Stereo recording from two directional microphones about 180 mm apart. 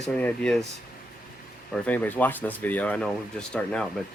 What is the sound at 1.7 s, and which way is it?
Speech, 10° left (ahead or behind).